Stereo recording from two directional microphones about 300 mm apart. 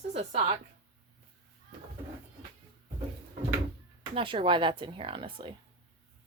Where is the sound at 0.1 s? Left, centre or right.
Centre.